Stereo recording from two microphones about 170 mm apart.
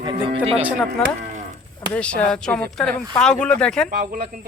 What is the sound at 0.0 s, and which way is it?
Speech, 30° right (ahead or behind).